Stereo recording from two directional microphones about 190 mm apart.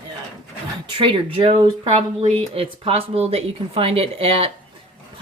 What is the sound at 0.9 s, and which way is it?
Speech, 25° right (ahead or behind).